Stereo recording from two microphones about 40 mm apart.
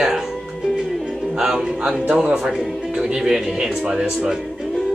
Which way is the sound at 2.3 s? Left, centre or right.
Centre.